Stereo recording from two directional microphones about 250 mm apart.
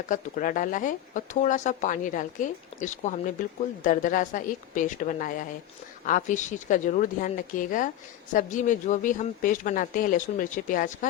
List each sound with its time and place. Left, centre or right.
0.1 s speech: left